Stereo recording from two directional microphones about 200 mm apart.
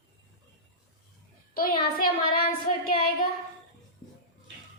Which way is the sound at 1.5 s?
45° left (ahead or behind).